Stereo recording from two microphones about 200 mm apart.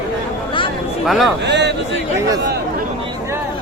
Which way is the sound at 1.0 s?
Centre (ahead or behind).